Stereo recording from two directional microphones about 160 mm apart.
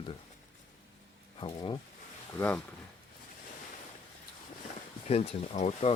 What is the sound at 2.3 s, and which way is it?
Speech, 10° left (ahead or behind).